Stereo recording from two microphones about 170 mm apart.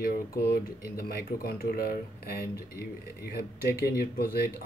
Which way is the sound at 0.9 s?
60° left (ahead or behind).